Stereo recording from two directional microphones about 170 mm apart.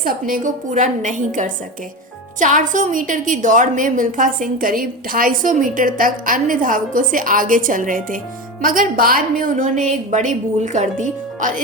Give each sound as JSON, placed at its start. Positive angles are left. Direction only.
{"t": 0.0, "sound": "a woman's voice", "side_deg": -55}